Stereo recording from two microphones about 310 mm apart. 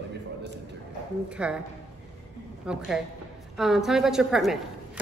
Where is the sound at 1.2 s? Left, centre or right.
Centre.